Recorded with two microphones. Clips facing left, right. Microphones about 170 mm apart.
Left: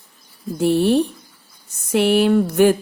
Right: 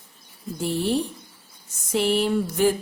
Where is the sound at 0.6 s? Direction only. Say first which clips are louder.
Left 8 dB; 65° left (ahead or behind).